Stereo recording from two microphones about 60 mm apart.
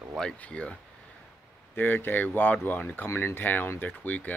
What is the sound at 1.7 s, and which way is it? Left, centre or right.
Speech, left.